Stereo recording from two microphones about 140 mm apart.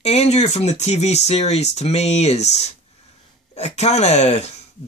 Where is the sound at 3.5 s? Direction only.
50° left (ahead or behind).